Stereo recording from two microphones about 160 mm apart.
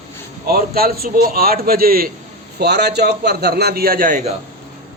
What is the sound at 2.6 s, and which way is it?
A man's voice, 90° right.